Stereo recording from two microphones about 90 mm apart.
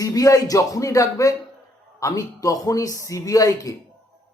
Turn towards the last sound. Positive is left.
turn(degrees=40)  # may be behind; listen again after turning